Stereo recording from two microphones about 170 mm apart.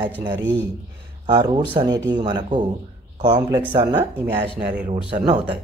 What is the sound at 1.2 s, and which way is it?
Speech, 25° right (ahead or behind).